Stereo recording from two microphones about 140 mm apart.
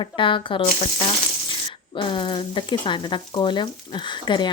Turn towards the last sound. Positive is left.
turn(degrees=35)  # may be behind; listen again after turning